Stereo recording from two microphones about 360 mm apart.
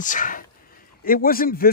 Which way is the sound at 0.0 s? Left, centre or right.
Left.